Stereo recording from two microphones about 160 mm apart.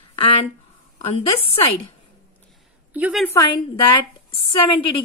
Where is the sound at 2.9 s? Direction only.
10° right (ahead or behind).